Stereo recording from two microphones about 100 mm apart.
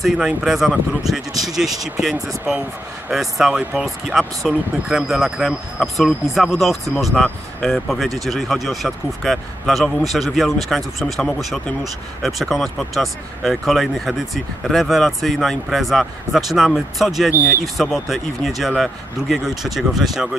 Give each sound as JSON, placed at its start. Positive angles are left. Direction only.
{"t": 0.0, "sound": "speech", "side_deg": -5}
{"t": 1.3, "sound": "speech", "side_deg": -40}
{"t": 2.0, "sound": "speech", "side_deg": 0}